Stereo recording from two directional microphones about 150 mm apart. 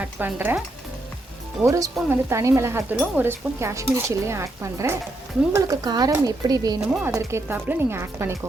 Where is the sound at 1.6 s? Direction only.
20° right (ahead or behind).